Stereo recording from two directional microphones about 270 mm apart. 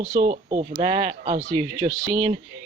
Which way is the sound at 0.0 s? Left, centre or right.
Centre.